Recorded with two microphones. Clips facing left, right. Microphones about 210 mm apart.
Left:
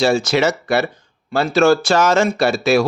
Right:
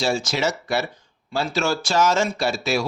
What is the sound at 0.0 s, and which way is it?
Speech, 60° left (ahead or behind).